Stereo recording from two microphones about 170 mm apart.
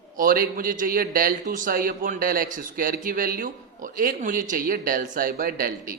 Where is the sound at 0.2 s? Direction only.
55° right (ahead or behind).